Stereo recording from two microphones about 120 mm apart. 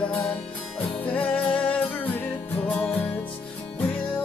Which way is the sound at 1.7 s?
15° left (ahead or behind).